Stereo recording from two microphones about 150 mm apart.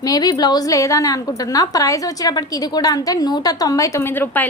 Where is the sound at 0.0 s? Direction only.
25° left (ahead or behind).